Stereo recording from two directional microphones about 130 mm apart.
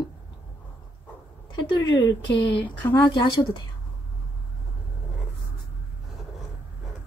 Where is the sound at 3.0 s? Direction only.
35° left (ahead or behind).